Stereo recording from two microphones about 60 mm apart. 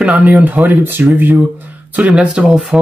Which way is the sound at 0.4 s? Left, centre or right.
Right.